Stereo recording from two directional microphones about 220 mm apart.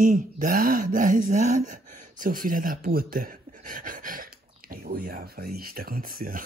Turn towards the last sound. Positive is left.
turn(degrees=-40)  # may be behind; listen again after turning